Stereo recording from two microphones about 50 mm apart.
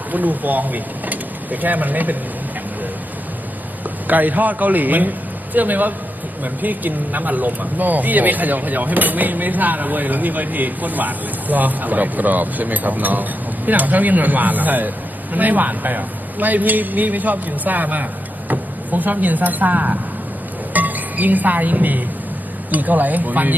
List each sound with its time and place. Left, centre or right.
0.1 s speech: right
4.0 s speech: right